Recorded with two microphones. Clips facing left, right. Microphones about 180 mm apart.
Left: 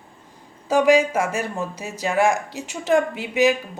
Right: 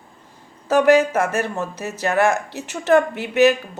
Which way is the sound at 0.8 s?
10° left (ahead or behind).